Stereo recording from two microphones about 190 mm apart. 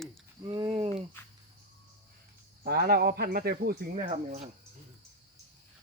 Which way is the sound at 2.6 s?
50° right (ahead or behind).